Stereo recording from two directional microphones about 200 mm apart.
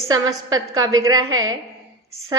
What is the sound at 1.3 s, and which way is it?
Speech, 90° right.